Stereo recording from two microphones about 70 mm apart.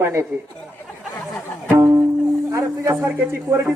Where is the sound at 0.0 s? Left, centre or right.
Right.